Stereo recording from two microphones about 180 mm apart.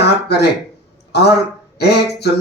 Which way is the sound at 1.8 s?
65° left (ahead or behind).